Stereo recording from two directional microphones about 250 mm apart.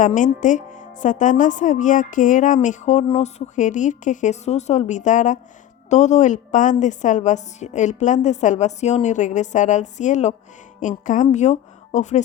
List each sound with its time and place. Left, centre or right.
0.0 s a woman's voice: left